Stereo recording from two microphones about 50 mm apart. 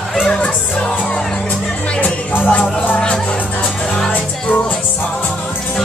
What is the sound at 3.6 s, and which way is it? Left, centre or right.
Music, centre.